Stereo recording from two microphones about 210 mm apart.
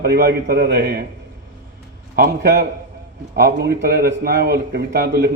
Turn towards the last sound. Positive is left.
turn(degrees=-50)  # may be behind; listen again after turning